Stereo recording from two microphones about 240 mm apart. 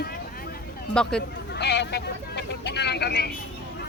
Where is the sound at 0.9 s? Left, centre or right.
Centre.